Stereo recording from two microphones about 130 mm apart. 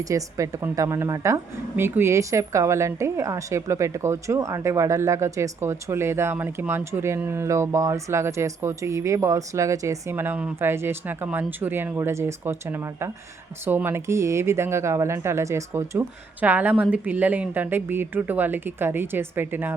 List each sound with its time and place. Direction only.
0.0 s a woman's voice: 25° right (ahead or behind)